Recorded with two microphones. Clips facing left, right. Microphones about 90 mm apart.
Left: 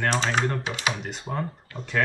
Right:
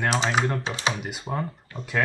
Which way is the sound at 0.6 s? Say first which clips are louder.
Right 1 dB; 30° right (ahead or behind).